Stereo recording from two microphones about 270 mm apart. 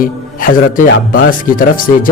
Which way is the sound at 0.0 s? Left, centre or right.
Left.